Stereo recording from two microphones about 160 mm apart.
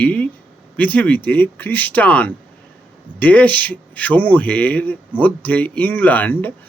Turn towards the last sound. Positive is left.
turn(degrees=10)  # may be behind; listen again after turning